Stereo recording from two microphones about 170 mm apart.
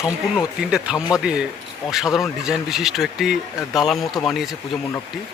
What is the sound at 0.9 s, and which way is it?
Speech, 20° left (ahead or behind).